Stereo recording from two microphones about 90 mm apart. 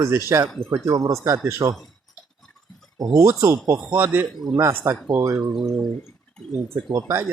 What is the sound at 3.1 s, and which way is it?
Speech, 35° right (ahead or behind).